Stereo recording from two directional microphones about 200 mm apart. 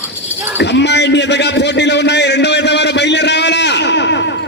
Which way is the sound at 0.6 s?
60° left (ahead or behind).